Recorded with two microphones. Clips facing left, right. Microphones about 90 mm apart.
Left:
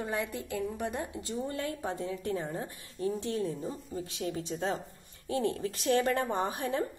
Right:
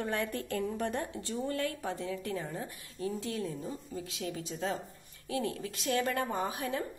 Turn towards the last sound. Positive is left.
turn(degrees=35)  # may be behind; listen again after turning